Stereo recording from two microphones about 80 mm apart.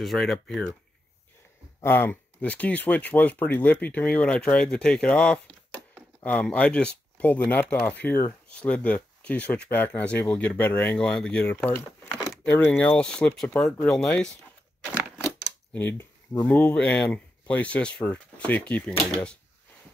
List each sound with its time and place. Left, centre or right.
0.0 s speech: centre
1.8 s speech: left
2.4 s speech: centre
15.7 s speech: left